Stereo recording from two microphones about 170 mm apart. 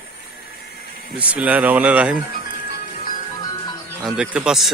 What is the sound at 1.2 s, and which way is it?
Speech, 10° right (ahead or behind).